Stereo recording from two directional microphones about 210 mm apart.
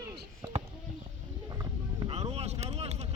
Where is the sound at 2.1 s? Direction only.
30° right (ahead or behind).